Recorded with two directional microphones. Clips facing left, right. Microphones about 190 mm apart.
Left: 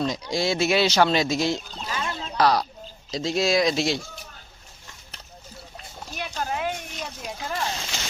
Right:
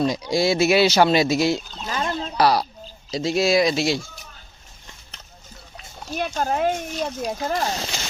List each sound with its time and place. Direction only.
0.0 s speech: 10° right (ahead or behind)
1.9 s a sound: 45° right (ahead or behind)
2.4 s speech: 10° right (ahead or behind)
6.1 s speech: 45° right (ahead or behind)